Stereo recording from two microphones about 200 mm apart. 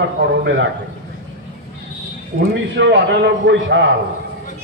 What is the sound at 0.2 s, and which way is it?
Speech, 60° right (ahead or behind).